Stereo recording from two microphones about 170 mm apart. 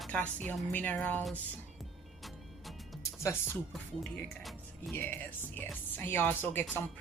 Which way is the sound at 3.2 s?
15° left (ahead or behind).